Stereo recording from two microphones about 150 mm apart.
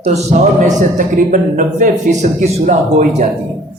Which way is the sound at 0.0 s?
45° right (ahead or behind).